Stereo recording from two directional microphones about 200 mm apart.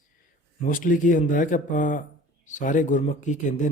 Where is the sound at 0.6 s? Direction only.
40° left (ahead or behind).